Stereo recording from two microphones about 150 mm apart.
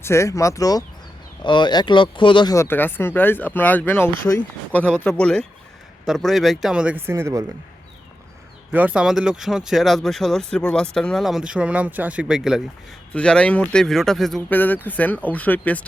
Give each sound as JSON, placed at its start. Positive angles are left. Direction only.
{"t": 0.0, "sound": "speech", "side_deg": 20}
{"t": 2.6, "sound": "speech", "side_deg": 15}
{"t": 8.7, "sound": "speech", "side_deg": -10}
{"t": 13.1, "sound": "speech", "side_deg": 5}